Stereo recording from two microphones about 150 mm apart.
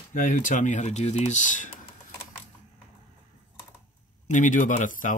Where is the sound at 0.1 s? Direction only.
60° left (ahead or behind).